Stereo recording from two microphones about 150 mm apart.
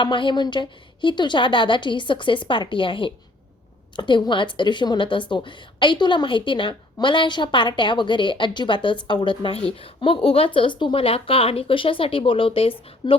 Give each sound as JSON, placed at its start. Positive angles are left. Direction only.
{"t": 0.0, "sound": "a woman's voice", "side_deg": 30}